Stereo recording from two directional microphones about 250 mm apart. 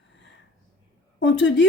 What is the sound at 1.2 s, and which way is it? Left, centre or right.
Speech, left.